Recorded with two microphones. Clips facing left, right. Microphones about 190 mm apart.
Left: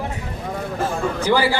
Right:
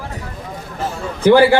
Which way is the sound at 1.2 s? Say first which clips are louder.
Right 10 dB; 60° right (ahead or behind).